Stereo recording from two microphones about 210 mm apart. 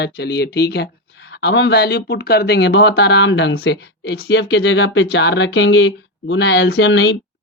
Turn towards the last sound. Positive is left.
turn(degrees=60)  # may be behind; listen again after turning